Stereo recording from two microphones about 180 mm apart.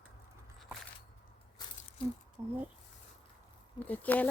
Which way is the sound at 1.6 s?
20° left (ahead or behind).